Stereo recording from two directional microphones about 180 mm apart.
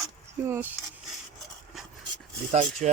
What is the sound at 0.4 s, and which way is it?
Speech, 15° right (ahead or behind).